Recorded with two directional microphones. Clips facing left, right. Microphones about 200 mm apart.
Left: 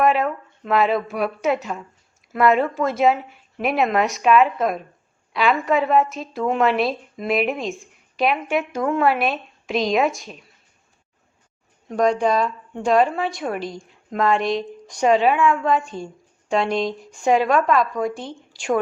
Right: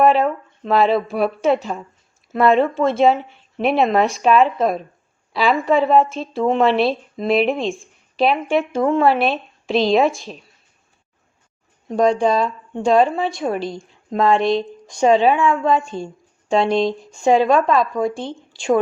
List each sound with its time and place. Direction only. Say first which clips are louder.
0.0 s speech: right 4 dB; 30° right (ahead or behind)
11.9 s speech: right 3 dB; 25° right (ahead or behind)